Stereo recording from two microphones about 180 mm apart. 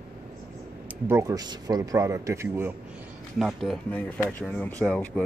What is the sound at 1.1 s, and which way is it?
A man's voice, 15° right (ahead or behind).